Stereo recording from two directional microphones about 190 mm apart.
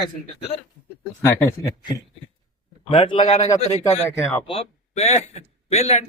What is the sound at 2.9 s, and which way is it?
Speech, 25° left (ahead or behind).